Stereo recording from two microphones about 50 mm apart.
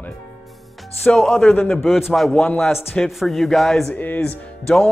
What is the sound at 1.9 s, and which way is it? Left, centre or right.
A man's voice, centre.